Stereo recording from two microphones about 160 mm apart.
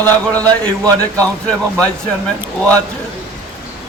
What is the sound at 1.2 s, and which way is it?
A man's voice, 5° left (ahead or behind).